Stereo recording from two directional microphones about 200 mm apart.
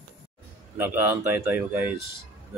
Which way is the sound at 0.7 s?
10° right (ahead or behind).